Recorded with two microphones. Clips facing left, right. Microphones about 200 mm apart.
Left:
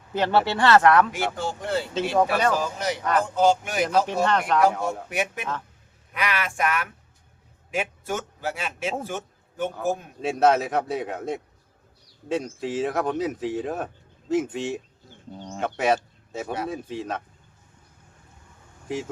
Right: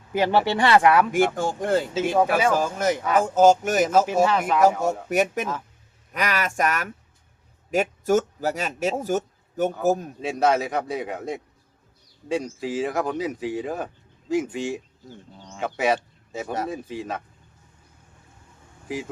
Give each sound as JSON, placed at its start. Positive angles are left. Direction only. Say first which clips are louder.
{"t": 0.1, "sound": "speech", "louder": "right 1 dB", "side_deg": -10}
{"t": 1.1, "sound": "speech", "louder": "right 6 dB", "side_deg": -50}
{"t": 3.0, "sound": "speech", "louder": "even", "side_deg": -5}
{"t": 3.2, "sound": "speech", "louder": "right 6 dB", "side_deg": -45}
{"t": 4.0, "sound": "speech", "louder": "right 3 dB", "side_deg": -5}
{"t": 5.0, "sound": "speech", "louder": "right 6 dB", "side_deg": -40}
{"t": 10.2, "sound": "speech", "louder": "left 1 dB", "side_deg": 0}
{"t": 15.4, "sound": "bird", "louder": "left 7 dB", "side_deg": 35}
{"t": 15.6, "sound": "speech", "louder": "even", "side_deg": 0}
{"t": 18.9, "sound": "speech", "louder": "left 1 dB", "side_deg": 0}